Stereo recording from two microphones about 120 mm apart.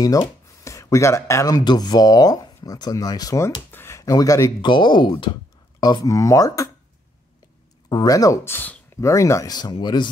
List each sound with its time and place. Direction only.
0.0 s speech: 30° left (ahead or behind)
4.6 s speech: 40° left (ahead or behind)
7.9 s speech: 30° left (ahead or behind)